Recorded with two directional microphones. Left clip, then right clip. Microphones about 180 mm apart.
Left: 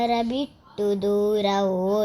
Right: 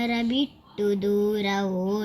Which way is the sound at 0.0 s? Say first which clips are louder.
Left 3 dB; 30° left (ahead or behind).